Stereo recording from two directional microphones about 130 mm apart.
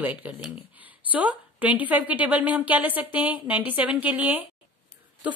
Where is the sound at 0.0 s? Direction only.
10° right (ahead or behind).